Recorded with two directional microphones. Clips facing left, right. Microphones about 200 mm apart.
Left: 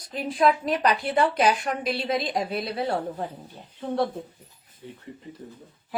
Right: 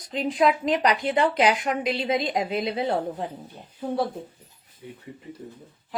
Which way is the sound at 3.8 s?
5° right (ahead or behind).